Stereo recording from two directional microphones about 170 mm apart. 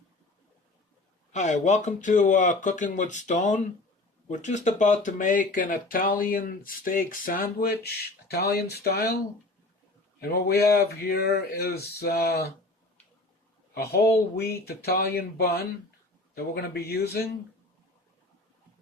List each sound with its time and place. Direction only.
1.3 s speech: 45° left (ahead or behind); by 9.1 s 70° left (ahead or behind)
10.2 s speech: 75° left (ahead or behind)
13.7 s speech: 70° left (ahead or behind)